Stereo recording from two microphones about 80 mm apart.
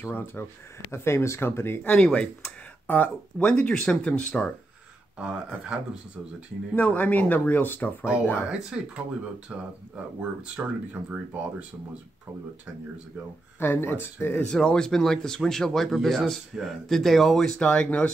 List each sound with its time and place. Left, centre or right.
0.0 s speech: left
2.0 s speech: centre
2.9 s speech: left
5.1 s speech: centre
6.7 s speech: left
8.5 s speech: centre
13.6 s speech: left
14.5 s speech: centre